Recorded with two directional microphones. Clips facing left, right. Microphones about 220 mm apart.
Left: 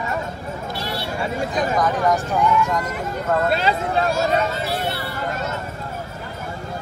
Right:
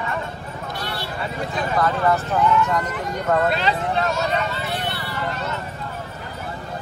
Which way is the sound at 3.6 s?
40° left (ahead or behind).